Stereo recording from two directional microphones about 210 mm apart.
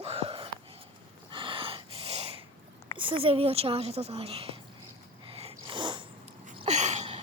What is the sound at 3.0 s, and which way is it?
A woman's voice, 25° right (ahead or behind).